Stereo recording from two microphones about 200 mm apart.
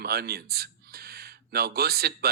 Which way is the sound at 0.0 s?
50° right (ahead or behind).